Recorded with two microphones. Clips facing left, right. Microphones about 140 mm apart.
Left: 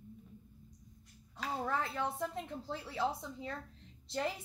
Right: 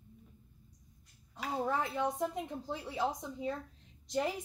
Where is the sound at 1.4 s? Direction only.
15° right (ahead or behind).